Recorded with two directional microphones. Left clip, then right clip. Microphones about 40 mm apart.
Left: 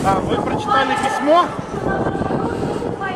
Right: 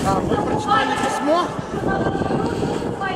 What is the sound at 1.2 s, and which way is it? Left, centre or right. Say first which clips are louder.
Speech: left 7 dB; left.